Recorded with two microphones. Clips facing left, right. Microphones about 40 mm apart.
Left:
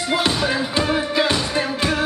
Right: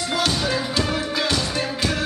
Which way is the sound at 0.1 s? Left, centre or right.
Left.